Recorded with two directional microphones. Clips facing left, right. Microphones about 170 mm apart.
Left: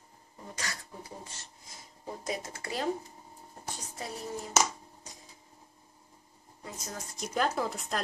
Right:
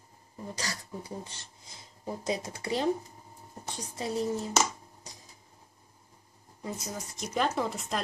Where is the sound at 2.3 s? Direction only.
25° right (ahead or behind).